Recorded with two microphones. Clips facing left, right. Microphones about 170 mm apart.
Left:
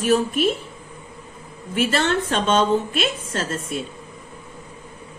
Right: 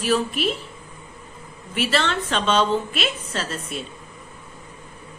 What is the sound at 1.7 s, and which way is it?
A woman's voice, 50° left (ahead or behind).